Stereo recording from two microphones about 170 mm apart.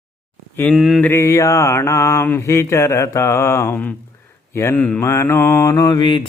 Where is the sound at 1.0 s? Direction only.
15° left (ahead or behind).